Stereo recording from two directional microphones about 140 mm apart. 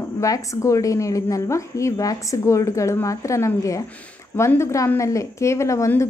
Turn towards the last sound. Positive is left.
turn(degrees=20)  # may be behind; listen again after turning